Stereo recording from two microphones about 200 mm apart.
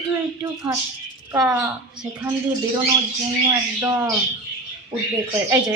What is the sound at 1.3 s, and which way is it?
Speech, 5° right (ahead or behind).